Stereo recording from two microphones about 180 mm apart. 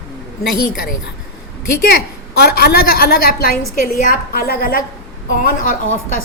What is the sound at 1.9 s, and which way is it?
A woman's voice, 60° left (ahead or behind).